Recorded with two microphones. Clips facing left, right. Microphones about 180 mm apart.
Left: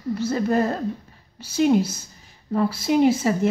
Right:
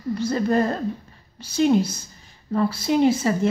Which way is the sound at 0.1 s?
5° left (ahead or behind).